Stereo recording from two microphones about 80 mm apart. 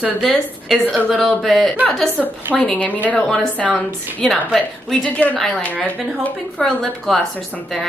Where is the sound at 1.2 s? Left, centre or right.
Centre.